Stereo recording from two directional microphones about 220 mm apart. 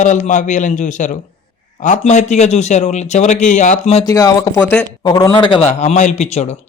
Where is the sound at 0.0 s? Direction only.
35° left (ahead or behind).